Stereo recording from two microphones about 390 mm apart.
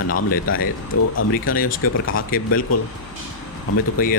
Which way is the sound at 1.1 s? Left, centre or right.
Left.